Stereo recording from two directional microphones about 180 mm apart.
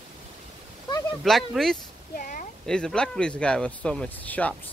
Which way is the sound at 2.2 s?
50° left (ahead or behind).